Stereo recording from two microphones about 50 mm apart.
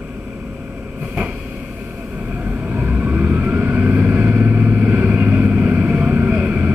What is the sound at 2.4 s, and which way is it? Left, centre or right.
Vehicle, right.